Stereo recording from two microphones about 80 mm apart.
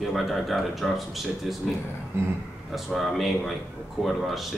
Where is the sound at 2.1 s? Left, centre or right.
Right.